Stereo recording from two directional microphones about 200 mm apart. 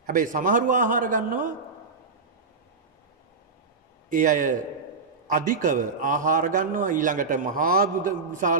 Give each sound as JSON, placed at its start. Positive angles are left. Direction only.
{"t": 0.0, "sound": "a man's voice", "side_deg": -40}
{"t": 4.1, "sound": "a man's voice", "side_deg": -40}